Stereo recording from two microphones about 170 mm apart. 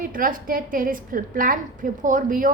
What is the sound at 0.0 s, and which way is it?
A woman's voice, 55° right (ahead or behind).